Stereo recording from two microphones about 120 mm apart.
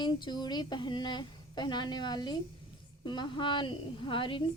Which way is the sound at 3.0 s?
40° left (ahead or behind).